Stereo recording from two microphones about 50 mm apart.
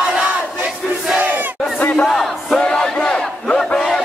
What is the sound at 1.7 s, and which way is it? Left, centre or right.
Battle cry, left.